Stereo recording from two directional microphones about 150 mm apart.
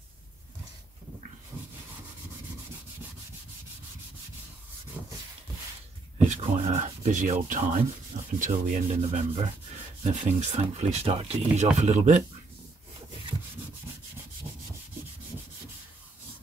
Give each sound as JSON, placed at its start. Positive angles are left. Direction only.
{"t": 6.2, "sound": "speech", "side_deg": -50}